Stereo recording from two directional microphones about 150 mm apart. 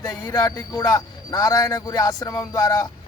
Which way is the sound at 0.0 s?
25° left (ahead or behind).